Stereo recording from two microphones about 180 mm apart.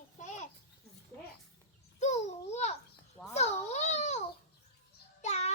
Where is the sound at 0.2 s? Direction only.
40° left (ahead or behind).